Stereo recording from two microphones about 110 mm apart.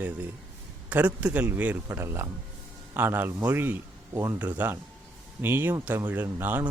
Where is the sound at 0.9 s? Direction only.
15° right (ahead or behind).